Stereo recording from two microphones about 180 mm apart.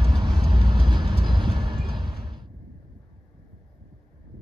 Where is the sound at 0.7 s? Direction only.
25° right (ahead or behind).